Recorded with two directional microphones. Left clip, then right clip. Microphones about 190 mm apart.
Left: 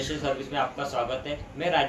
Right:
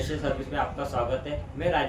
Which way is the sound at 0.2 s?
20° right (ahead or behind).